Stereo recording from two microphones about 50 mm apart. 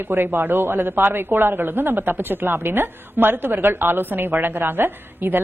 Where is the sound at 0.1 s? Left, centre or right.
Right.